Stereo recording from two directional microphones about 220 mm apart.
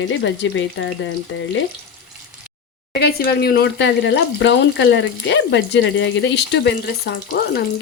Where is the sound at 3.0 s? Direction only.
45° left (ahead or behind).